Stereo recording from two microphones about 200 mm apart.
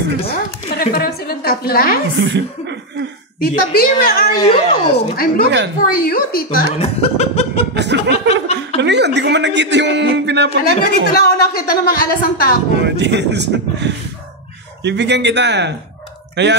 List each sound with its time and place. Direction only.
0.7 s a woman's voice: 50° left (ahead or behind)
2.2 s a man's voice: 65° right (ahead or behind)
3.4 s a woman's voice: 45° left (ahead or behind)
4.4 s speech: 25° left (ahead or behind)
5.1 s a woman's voice: 50° left (ahead or behind)
6.8 s laughter: 30° left (ahead or behind)
7.7 s chuckle: 60° right (ahead or behind)
8.7 s a man's voice: 60° right (ahead or behind)
10.6 s a woman's voice: 45° left (ahead or behind)
12.8 s a man's voice: 60° right (ahead or behind)